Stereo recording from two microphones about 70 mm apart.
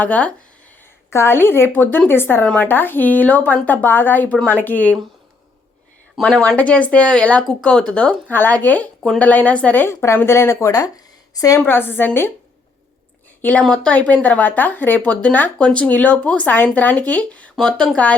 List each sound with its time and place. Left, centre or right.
0.0 s speech: left
0.8 s a woman's voice: left
6.1 s speech: centre
8.3 s speech: left
9.8 s a woman's voice: left
11.6 s a woman's voice: left
13.4 s speech: left
17.6 s speech: centre